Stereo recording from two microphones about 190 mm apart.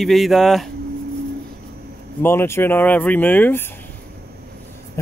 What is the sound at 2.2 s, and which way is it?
Speech, 10° left (ahead or behind).